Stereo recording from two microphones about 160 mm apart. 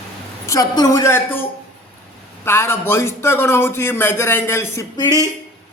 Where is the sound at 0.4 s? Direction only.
20° left (ahead or behind).